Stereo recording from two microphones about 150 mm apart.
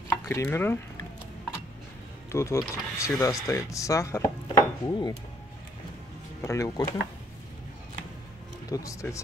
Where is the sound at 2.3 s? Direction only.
20° left (ahead or behind).